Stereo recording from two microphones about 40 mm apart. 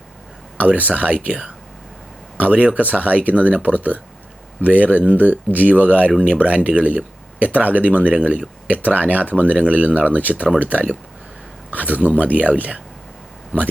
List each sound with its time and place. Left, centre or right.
0.6 s speech: right
2.4 s speech: right